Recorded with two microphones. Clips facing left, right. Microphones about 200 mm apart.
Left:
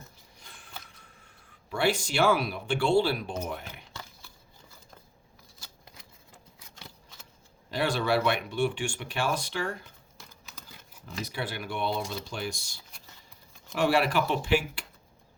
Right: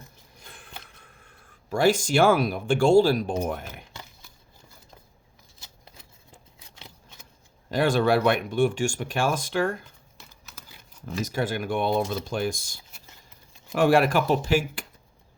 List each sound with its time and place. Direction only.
0.4 s a sound: 55° right (ahead or behind)
1.7 s speech: 45° right (ahead or behind)
6.7 s scissors: 20° right (ahead or behind)
7.7 s speech: 50° right (ahead or behind)
11.0 s speech: 45° right (ahead or behind)
13.7 s speech: 50° right (ahead or behind)